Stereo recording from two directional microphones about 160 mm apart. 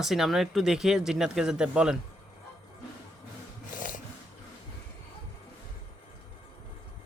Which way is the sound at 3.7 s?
55° left (ahead or behind).